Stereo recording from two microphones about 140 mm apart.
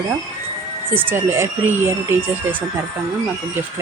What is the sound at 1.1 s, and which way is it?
Speech, 15° right (ahead or behind).